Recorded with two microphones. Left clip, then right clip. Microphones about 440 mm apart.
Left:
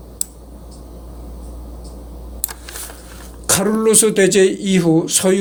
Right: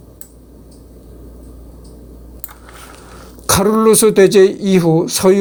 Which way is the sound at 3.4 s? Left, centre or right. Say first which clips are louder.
Right 4 dB; right.